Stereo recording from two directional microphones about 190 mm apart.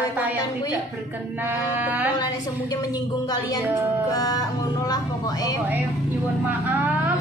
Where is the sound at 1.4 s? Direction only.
10° right (ahead or behind).